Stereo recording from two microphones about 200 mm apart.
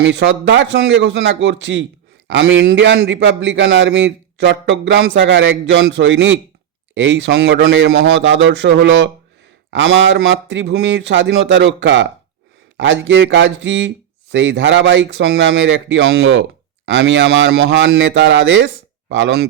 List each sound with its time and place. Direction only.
0.0 s speech: 65° right (ahead or behind)